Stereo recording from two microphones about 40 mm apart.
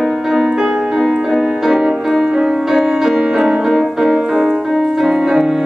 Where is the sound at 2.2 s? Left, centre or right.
Centre.